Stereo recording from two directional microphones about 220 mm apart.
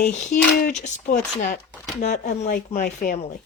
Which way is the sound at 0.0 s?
35° left (ahead or behind).